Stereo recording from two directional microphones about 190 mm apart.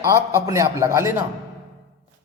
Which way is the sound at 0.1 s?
15° right (ahead or behind).